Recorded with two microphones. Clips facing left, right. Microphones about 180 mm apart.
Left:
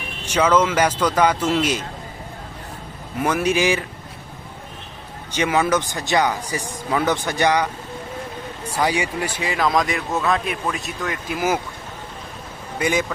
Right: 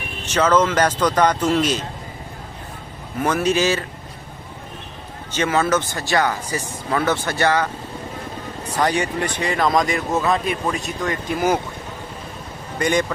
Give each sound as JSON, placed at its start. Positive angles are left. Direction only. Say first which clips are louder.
{"t": 0.3, "sound": "speech", "louder": "even", "side_deg": 10}
{"t": 3.2, "sound": "speech", "louder": "right 1 dB", "side_deg": 10}
{"t": 5.3, "sound": "speech", "louder": "even", "side_deg": 15}
{"t": 8.8, "sound": "speech", "louder": "right 1 dB", "side_deg": 10}
{"t": 12.8, "sound": "speech", "louder": "right 2 dB", "side_deg": 5}